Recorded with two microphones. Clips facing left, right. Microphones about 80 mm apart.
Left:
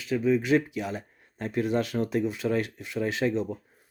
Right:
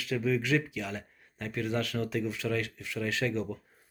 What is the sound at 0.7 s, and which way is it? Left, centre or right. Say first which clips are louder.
Speech: left 4 dB; left.